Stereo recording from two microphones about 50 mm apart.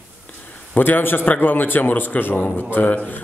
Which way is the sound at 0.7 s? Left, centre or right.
Left.